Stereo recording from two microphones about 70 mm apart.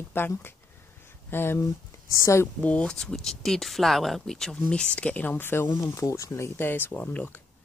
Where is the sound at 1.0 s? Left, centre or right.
Left.